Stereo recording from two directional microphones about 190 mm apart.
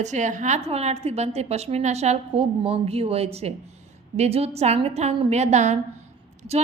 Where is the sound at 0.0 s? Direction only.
40° right (ahead or behind).